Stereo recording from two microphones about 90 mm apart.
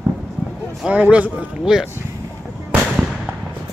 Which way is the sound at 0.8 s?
15° right (ahead or behind).